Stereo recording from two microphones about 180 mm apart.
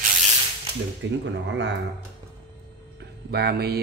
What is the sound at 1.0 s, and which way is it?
Speech, 85° right.